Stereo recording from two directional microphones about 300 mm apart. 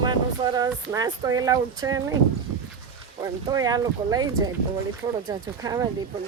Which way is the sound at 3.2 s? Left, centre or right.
Centre.